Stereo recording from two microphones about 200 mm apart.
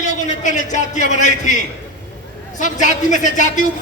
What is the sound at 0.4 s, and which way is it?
Speech, 35° left (ahead or behind).